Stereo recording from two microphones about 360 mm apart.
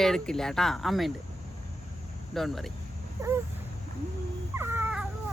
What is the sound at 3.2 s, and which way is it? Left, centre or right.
Dog, centre.